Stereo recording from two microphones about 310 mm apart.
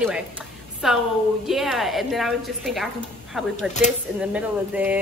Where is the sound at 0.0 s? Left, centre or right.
Centre.